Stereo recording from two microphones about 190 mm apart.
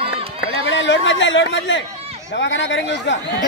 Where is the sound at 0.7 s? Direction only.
75° left (ahead or behind).